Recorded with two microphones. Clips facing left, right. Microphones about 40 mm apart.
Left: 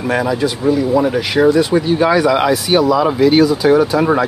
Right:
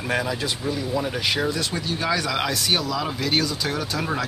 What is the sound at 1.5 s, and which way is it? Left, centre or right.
Speech, left.